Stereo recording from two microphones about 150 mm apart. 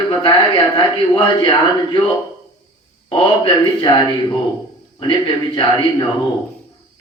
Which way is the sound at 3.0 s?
35° left (ahead or behind).